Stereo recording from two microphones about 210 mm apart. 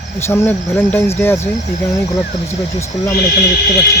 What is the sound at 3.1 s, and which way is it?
Speech, 50° left (ahead or behind).